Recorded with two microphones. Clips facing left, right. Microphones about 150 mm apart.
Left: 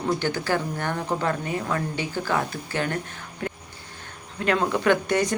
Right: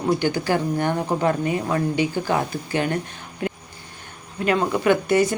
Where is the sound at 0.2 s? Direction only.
15° right (ahead or behind).